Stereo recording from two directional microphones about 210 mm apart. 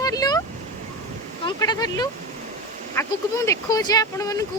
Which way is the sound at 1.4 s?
20° left (ahead or behind).